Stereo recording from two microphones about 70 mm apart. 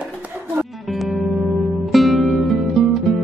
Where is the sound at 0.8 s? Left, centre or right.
Centre.